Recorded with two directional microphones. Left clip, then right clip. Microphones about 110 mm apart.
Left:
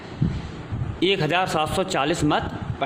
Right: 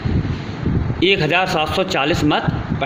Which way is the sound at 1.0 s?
35° left (ahead or behind).